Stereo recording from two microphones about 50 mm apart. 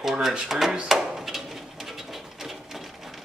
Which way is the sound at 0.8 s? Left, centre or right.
Centre.